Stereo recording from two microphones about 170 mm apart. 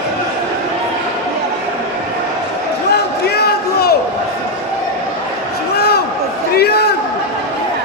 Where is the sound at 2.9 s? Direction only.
70° left (ahead or behind).